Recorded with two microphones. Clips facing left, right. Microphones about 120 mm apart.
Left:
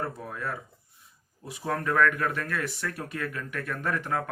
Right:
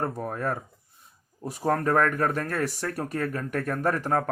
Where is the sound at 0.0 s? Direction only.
45° right (ahead or behind).